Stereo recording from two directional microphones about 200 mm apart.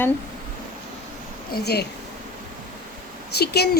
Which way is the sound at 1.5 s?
55° left (ahead or behind).